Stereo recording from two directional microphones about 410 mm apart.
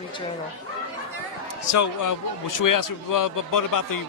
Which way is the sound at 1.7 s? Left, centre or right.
Left.